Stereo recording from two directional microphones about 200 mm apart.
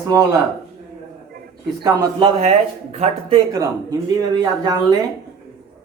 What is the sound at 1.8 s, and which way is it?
Speech, 20° right (ahead or behind).